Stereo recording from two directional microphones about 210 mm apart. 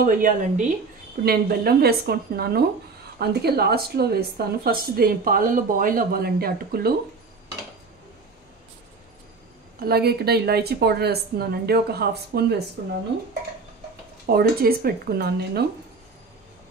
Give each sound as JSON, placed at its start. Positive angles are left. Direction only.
{"t": 0.0, "sound": "a woman's voice", "side_deg": -40}
{"t": 9.8, "sound": "a woman's voice", "side_deg": -50}
{"t": 14.2, "sound": "a woman's voice", "side_deg": -45}